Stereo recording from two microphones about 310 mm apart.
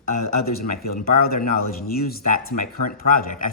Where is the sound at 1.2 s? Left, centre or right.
Left.